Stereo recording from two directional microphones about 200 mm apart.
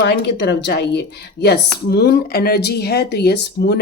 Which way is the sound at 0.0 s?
60° left (ahead or behind).